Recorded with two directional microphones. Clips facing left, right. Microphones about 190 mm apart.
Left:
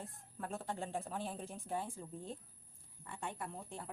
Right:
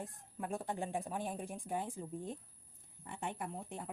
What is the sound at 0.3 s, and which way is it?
Speech, 15° right (ahead or behind).